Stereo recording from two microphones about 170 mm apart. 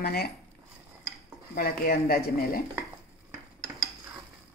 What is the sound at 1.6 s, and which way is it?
Speech, 60° left (ahead or behind).